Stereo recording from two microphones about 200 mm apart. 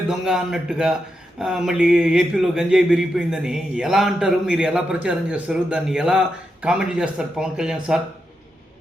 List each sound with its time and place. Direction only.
0.1 s speech: 5° right (ahead or behind)